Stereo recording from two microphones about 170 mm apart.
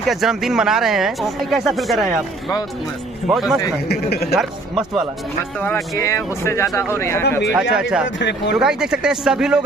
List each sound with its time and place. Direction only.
0.0 s speech: centre (ahead or behind)
3.3 s speech: centre (ahead or behind)
3.9 s speech: 70° left (ahead or behind)
5.6 s speech: 15° left (ahead or behind)
7.7 s speech: 5° right (ahead or behind)
8.2 s speech: 90° left
8.5 s speech: 5° right (ahead or behind)